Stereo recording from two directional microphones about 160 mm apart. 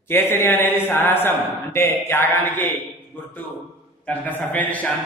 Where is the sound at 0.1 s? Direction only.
15° left (ahead or behind).